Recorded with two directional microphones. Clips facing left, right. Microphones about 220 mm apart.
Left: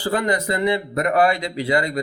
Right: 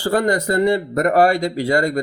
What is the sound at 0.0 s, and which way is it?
Speech, 45° right (ahead or behind).